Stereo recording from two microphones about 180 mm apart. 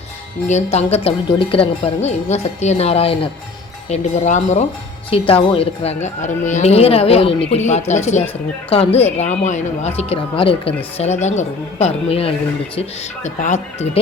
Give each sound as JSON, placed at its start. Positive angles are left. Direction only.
{"t": 0.4, "sound": "speech", "side_deg": 40}